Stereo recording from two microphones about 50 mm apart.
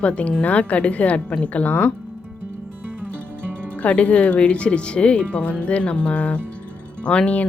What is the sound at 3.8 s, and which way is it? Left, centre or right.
Speech, left.